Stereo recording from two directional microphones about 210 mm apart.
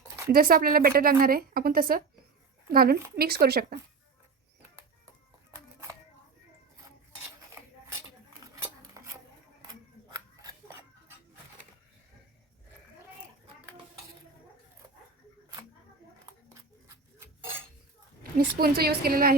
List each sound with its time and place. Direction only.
0.3 s a woman's voice: 45° right (ahead or behind)
9.0 s a sound: 15° right (ahead or behind)
10.1 s scissors: 15° right (ahead or behind)
18.2 s a woman's voice: 45° right (ahead or behind)